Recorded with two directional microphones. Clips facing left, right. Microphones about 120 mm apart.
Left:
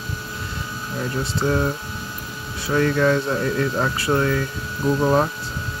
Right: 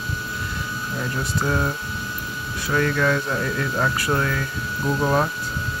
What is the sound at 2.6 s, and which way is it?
Speech, 30° left (ahead or behind).